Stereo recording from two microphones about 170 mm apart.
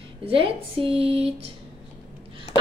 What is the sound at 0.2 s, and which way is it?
Speech, 35° right (ahead or behind).